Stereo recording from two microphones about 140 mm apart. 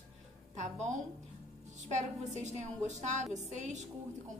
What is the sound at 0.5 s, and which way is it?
A woman's voice, 60° right (ahead or behind).